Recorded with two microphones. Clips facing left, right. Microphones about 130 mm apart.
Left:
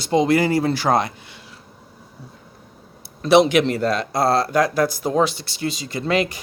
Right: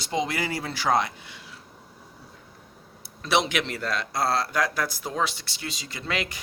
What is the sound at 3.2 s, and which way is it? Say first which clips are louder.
Speech: left 11 dB; 40° left (ahead or behind).